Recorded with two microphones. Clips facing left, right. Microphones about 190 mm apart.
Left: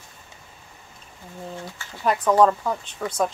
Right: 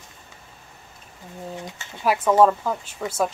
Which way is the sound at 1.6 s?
20° right (ahead or behind).